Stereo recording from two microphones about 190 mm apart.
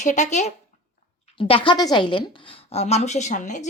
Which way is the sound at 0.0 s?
40° left (ahead or behind).